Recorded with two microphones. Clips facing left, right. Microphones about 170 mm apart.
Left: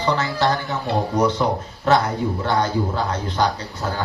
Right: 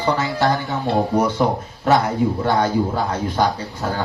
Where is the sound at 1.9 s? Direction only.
10° right (ahead or behind).